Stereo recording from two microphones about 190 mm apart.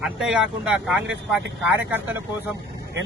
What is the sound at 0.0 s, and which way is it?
Speech, 5° right (ahead or behind).